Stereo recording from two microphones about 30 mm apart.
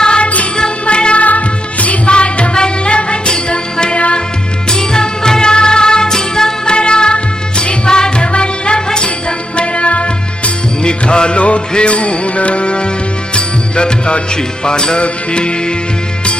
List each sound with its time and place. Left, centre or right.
0.2 s music: left
0.9 s music: left
1.2 s music of bollywood: left
2.0 s music: left
6.7 s music: left
10.8 s music: left
11.3 s music: left